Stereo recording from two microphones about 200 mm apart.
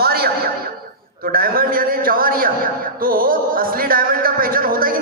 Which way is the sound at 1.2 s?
45° right (ahead or behind).